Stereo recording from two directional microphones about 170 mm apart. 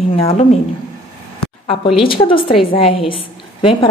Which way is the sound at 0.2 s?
40° left (ahead or behind).